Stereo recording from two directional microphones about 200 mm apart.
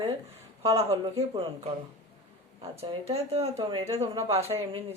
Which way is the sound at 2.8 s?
30° right (ahead or behind).